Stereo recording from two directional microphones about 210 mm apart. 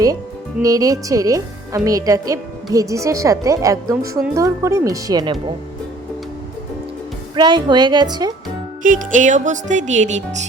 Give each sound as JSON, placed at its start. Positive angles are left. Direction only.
{"t": 0.6, "sound": "a woman's voice", "side_deg": -15}
{"t": 7.3, "sound": "a woman's voice", "side_deg": -20}
{"t": 8.8, "sound": "speech", "side_deg": -40}